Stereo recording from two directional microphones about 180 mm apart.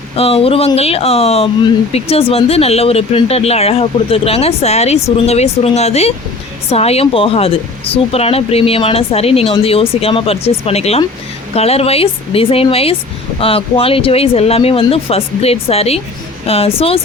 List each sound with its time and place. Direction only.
0.2 s speech: 30° left (ahead or behind)